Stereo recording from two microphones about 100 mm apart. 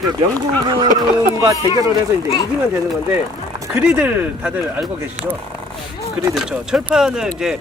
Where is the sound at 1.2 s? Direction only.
35° right (ahead or behind).